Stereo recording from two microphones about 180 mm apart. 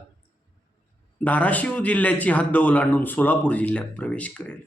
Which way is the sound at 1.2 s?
10° left (ahead or behind).